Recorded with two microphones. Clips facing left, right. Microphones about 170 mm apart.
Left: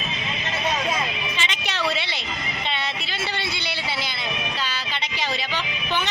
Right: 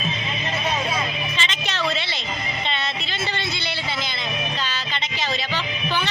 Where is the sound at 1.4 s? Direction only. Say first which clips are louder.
Even; 10° left (ahead or behind).